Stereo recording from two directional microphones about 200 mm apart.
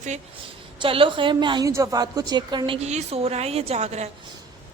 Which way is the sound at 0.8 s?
25° right (ahead or behind).